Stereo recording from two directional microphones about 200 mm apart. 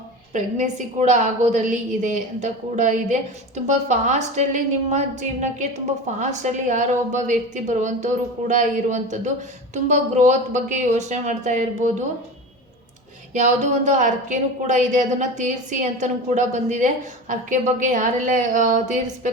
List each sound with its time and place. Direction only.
0.3 s a woman's voice: 35° right (ahead or behind)
13.3 s a woman's voice: 35° right (ahead or behind)